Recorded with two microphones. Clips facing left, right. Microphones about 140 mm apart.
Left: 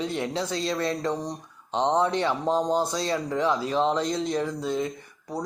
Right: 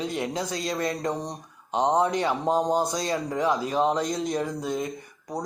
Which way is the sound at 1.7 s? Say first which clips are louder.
Right 1 dB; 10° right (ahead or behind).